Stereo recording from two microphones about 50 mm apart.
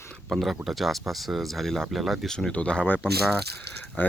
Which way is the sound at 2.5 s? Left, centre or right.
Left.